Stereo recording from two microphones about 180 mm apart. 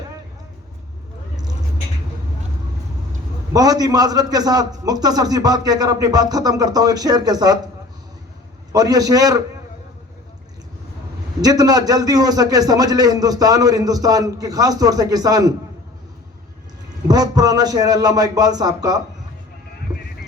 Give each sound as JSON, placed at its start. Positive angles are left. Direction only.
{"t": 3.5, "sound": "a man's voice", "side_deg": -20}
{"t": 8.7, "sound": "a man's voice", "side_deg": -20}
{"t": 11.3, "sound": "a man's voice", "side_deg": -20}
{"t": 17.1, "sound": "a man's voice", "side_deg": -20}